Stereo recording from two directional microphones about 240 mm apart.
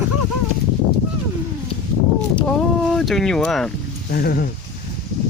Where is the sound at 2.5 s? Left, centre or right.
Centre.